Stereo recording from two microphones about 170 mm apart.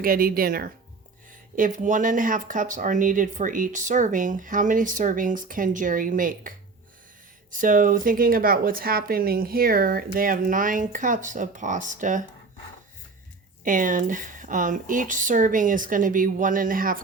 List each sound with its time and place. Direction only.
0.0 s speech: 60° right (ahead or behind)
7.5 s speech: 50° right (ahead or behind)
13.7 s speech: 50° right (ahead or behind)